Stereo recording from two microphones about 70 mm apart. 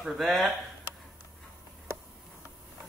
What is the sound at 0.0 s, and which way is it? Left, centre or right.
Speech, centre.